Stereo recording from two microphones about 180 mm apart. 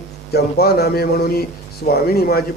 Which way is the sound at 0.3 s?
60° left (ahead or behind).